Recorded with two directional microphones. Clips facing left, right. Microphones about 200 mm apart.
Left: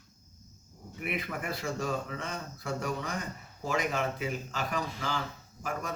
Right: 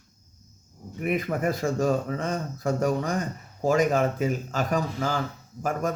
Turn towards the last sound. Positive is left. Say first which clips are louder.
# right 9 dB
turn(degrees=-45)  # may be behind; listen again after turning